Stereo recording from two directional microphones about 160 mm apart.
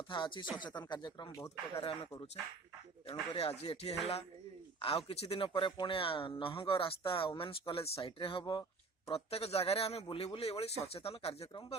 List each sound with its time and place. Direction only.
0.1 s speech: 30° left (ahead or behind)
1.8 s a man's voice: 35° left (ahead or behind)